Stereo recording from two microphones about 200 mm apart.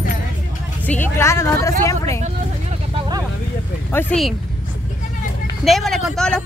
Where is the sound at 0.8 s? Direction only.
10° left (ahead or behind).